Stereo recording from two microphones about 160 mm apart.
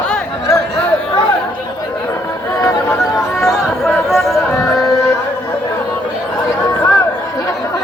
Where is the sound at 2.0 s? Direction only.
15° left (ahead or behind).